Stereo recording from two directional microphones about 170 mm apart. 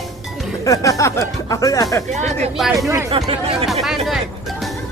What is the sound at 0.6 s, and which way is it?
Speech, 20° left (ahead or behind).